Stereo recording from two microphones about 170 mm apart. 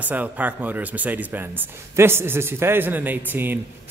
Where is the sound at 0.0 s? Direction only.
10° right (ahead or behind).